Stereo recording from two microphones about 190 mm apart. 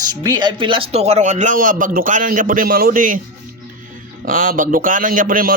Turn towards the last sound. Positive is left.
turn(degrees=-45)  # may be behind; listen again after turning